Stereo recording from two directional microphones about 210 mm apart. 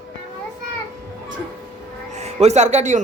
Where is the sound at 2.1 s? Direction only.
30° right (ahead or behind).